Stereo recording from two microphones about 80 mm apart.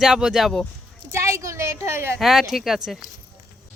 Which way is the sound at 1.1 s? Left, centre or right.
Right.